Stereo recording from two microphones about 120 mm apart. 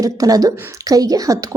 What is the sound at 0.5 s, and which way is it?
Speech, 20° right (ahead or behind).